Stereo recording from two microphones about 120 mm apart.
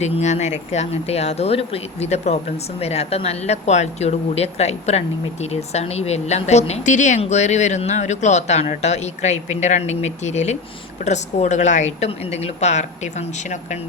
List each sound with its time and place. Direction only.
0.0 s speech: 70° left (ahead or behind); by 7.2 s 90° left
7.2 s speech: 70° left (ahead or behind)